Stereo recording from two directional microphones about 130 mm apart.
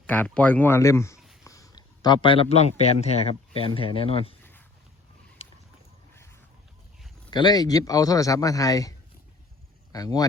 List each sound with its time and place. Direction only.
0.1 s a man's voice: 10° left (ahead or behind); by 4.4 s 45° left (ahead or behind)
7.3 s a man's voice: 35° left (ahead or behind)